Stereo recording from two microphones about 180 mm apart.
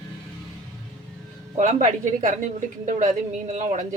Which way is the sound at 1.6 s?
40° right (ahead or behind).